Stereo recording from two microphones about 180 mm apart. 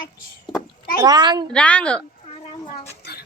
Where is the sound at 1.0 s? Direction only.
25° right (ahead or behind).